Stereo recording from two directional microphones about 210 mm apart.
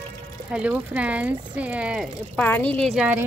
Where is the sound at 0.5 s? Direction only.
5° right (ahead or behind).